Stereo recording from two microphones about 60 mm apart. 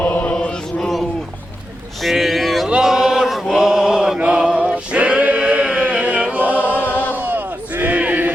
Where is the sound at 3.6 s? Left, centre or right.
Centre.